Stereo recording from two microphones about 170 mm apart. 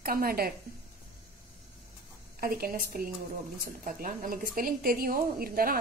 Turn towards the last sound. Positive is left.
turn(degrees=-60)  # may be behind; listen again after turning